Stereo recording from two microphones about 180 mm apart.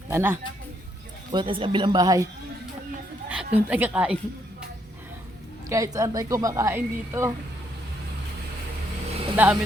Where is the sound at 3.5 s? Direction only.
10° right (ahead or behind).